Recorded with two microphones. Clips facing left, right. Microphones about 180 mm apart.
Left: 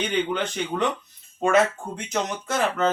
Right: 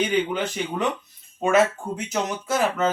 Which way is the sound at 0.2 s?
5° right (ahead or behind).